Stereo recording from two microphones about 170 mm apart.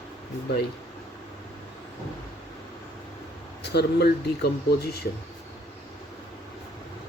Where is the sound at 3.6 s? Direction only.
70° left (ahead or behind).